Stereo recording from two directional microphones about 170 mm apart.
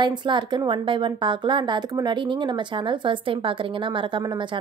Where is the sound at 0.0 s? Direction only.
25° right (ahead or behind).